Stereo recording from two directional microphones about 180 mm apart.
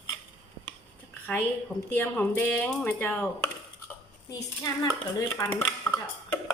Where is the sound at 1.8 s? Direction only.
10° left (ahead or behind).